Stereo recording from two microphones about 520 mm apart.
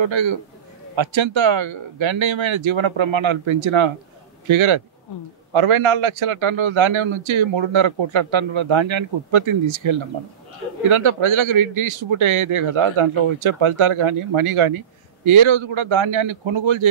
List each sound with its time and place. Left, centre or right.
0.0 s a man's voice: right